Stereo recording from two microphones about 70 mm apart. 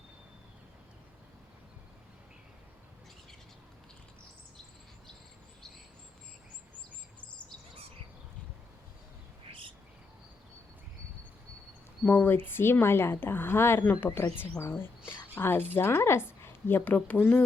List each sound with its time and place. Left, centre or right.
12.0 s a woman's voice: left